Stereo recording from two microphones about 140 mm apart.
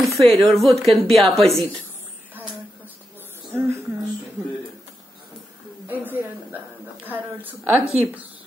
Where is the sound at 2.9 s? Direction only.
15° right (ahead or behind).